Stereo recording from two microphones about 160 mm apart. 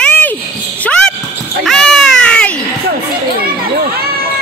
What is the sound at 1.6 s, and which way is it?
Baby cry, 5° left (ahead or behind).